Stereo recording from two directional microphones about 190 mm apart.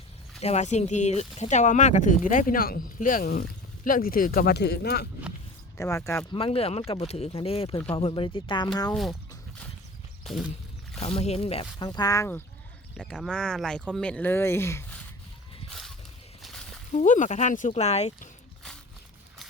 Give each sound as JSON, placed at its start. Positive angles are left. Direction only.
{"t": 0.4, "sound": "speech", "side_deg": 35}
{"t": 5.7, "sound": "speech", "side_deg": 15}
{"t": 6.3, "sound": "speech", "side_deg": 30}
{"t": 8.9, "sound": "speech", "side_deg": 0}
{"t": 10.2, "sound": "speech", "side_deg": 0}
{"t": 11.0, "sound": "speech", "side_deg": 35}
{"t": 13.0, "sound": "speech", "side_deg": 5}
{"t": 15.7, "sound": "a sound", "side_deg": 0}
{"t": 16.9, "sound": "speech", "side_deg": 40}